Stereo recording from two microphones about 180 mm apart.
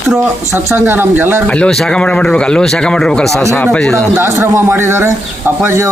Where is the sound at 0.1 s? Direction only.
15° right (ahead or behind).